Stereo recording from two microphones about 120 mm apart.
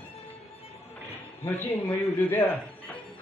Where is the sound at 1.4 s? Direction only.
20° left (ahead or behind).